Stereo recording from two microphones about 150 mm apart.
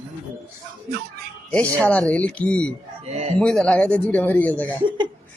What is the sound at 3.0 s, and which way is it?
Speech, 50° right (ahead or behind).